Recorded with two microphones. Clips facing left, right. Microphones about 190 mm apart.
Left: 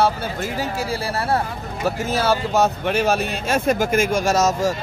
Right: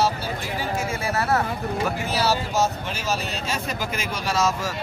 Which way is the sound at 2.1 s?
50° left (ahead or behind).